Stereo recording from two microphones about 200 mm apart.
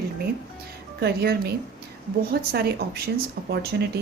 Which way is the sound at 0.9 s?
50° right (ahead or behind).